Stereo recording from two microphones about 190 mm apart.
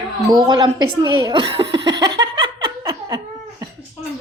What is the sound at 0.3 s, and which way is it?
A woman's voice, 20° right (ahead or behind).